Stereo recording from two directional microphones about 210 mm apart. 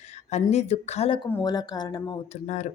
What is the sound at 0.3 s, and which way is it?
A woman's voice, 35° left (ahead or behind).